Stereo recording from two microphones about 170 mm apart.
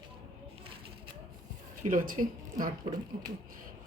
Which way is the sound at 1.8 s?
50° right (ahead or behind).